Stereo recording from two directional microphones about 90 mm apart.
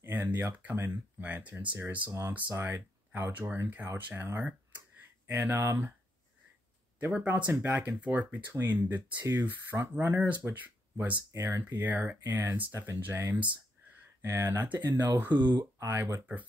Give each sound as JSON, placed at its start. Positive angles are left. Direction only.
{"t": 0.0, "sound": "speech", "side_deg": -20}
{"t": 7.0, "sound": "speech", "side_deg": -20}
{"t": 15.3, "sound": "speech", "side_deg": -55}
{"t": 15.8, "sound": "speech", "side_deg": -30}